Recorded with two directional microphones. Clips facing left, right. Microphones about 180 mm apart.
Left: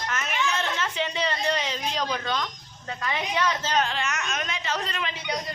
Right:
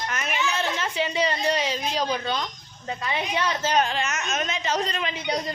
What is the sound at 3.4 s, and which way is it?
A woman's voice, 15° right (ahead or behind).